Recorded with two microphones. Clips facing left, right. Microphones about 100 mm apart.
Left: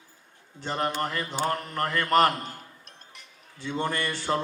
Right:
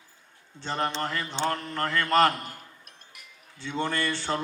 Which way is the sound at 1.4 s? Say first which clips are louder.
Right 1 dB; 35° left (ahead or behind).